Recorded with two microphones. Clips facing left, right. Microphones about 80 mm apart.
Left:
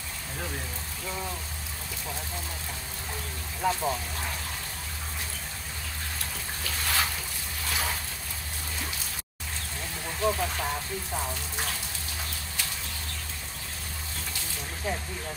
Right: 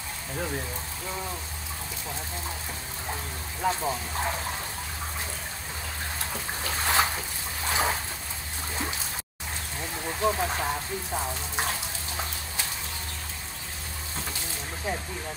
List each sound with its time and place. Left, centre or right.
3.6 s speech: centre
6.6 s speech: right
7.6 s vehicle: right
10.2 s speech: right
14.8 s speech: centre